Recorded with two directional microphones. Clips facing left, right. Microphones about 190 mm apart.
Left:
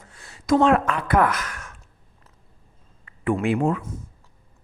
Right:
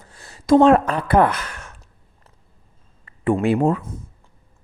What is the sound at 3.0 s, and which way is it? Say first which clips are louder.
Speech: right 4 dB; 30° right (ahead or behind).